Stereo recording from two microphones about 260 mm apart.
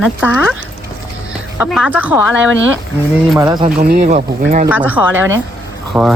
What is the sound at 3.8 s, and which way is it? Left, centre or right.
Speech, right.